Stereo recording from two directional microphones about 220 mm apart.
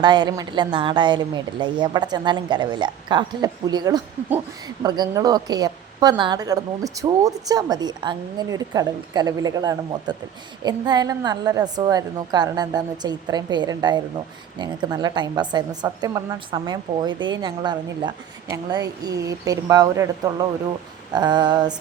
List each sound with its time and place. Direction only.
0.0 s a woman's voice: 20° right (ahead or behind)